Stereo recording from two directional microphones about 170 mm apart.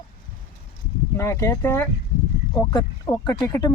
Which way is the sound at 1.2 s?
15° left (ahead or behind).